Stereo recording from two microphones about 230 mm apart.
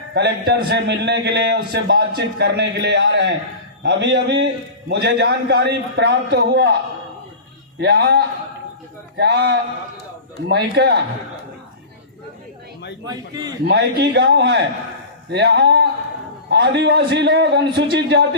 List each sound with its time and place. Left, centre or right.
0.1 s a man's voice: right
7.8 s a man's voice: right
13.1 s a man's voice: centre
13.7 s a man's voice: right